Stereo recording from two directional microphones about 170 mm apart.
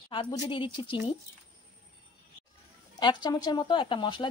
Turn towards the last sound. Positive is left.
turn(degrees=30)  # may be behind; listen again after turning